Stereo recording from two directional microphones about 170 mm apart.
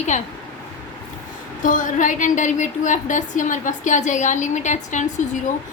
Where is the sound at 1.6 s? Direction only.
50° left (ahead or behind).